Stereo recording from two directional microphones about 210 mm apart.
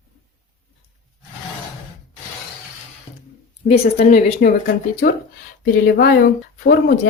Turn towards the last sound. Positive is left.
turn(degrees=45)  # may be behind; listen again after turning